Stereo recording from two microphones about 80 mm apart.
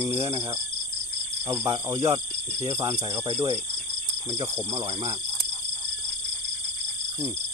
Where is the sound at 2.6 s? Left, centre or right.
Right.